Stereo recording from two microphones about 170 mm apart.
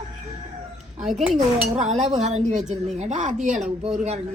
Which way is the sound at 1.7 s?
40° right (ahead or behind).